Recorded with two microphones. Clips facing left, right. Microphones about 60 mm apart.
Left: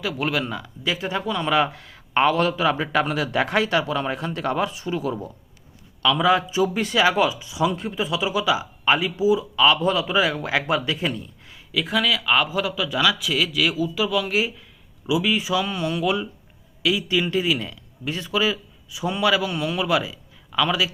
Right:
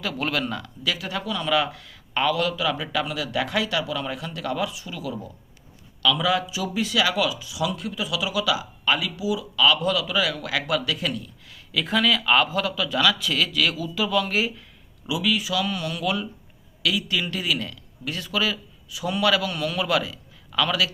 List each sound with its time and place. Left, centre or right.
0.0 s speech: centre
0.9 s a man's voice: left
11.7 s speech: centre
15.0 s a man's voice: centre